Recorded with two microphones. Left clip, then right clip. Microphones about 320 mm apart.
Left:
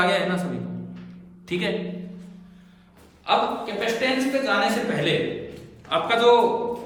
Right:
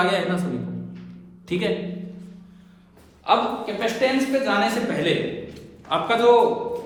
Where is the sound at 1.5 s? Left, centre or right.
Centre.